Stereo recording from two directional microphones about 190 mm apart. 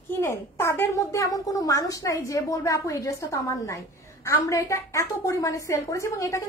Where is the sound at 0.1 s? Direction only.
10° left (ahead or behind).